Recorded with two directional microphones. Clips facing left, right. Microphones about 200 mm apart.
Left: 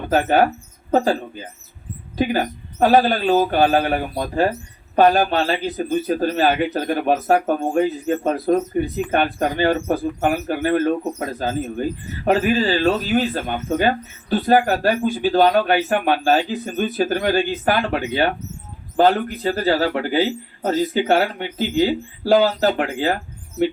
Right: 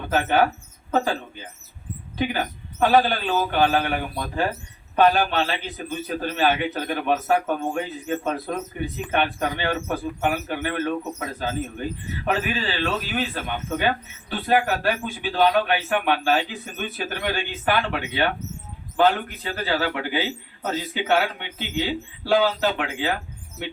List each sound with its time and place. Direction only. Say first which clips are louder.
0.1 s speech: left 4 dB; 40° left (ahead or behind)
2.1 s speech: left 6 dB; 40° left (ahead or behind)